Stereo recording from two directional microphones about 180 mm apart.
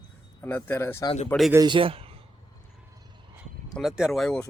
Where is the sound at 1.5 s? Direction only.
25° right (ahead or behind).